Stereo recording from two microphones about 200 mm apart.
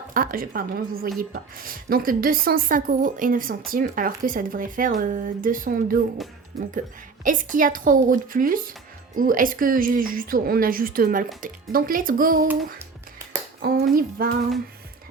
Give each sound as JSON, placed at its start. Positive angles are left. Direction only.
{"t": 0.1, "sound": "a woman's voice", "side_deg": -45}
{"t": 7.3, "sound": "a woman's voice", "side_deg": -40}
{"t": 13.6, "sound": "a woman's voice", "side_deg": -45}